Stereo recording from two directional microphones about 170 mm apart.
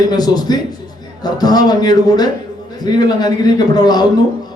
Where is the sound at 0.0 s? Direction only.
25° left (ahead or behind).